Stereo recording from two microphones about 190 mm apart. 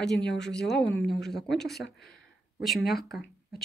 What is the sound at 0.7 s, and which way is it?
Speech, centre (ahead or behind).